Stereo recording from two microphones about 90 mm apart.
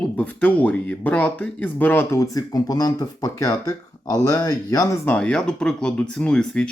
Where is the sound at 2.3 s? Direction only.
45° left (ahead or behind).